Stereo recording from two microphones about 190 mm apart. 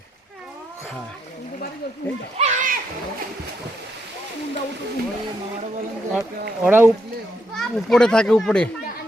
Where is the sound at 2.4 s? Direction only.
45° right (ahead or behind).